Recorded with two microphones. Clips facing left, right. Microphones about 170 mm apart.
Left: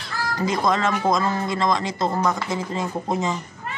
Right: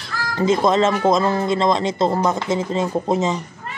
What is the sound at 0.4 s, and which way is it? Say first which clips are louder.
Speech: right 6 dB; 25° right (ahead or behind).